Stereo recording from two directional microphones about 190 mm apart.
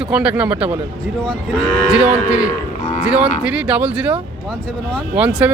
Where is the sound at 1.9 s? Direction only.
5° right (ahead or behind).